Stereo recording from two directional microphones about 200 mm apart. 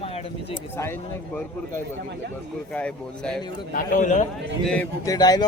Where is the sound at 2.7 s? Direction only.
5° left (ahead or behind).